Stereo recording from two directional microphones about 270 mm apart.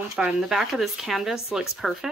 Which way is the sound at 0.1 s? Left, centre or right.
Centre.